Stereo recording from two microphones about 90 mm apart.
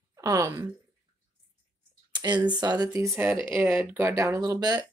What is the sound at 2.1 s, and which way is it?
Speech, 55° right (ahead or behind).